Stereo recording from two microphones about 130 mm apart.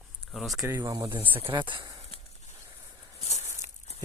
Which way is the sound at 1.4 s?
40° right (ahead or behind).